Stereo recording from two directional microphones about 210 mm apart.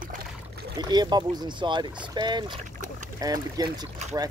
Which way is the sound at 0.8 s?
20° right (ahead or behind).